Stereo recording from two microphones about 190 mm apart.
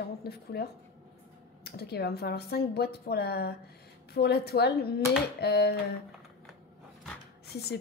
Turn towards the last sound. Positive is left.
turn(degrees=60)  # may be behind; listen again after turning